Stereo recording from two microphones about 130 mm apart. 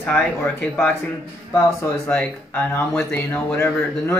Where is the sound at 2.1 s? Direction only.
15° left (ahead or behind).